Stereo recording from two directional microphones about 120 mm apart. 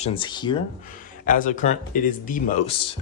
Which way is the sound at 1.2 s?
90° left.